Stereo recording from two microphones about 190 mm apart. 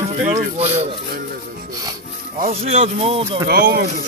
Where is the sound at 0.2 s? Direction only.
35° right (ahead or behind).